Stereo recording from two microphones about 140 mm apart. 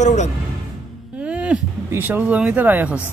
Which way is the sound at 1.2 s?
10° right (ahead or behind).